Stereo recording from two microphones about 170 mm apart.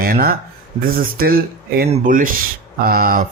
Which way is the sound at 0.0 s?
60° right (ahead or behind).